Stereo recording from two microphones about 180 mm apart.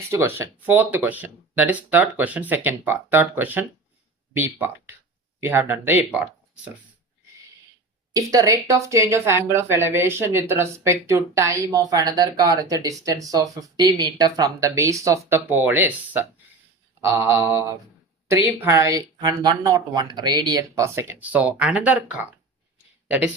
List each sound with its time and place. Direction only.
0.1 s speech: 15° right (ahead or behind)
8.1 s speech: 20° right (ahead or behind)